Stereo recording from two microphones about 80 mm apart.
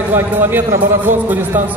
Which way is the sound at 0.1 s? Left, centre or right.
Right.